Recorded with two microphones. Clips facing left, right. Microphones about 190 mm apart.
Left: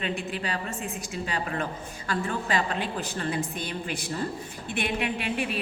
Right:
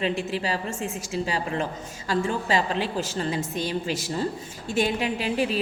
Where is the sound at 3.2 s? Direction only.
25° right (ahead or behind).